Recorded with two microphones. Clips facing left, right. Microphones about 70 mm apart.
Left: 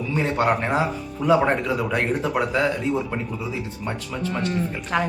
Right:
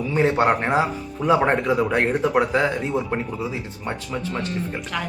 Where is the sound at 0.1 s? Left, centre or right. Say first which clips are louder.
Right 3 dB; right.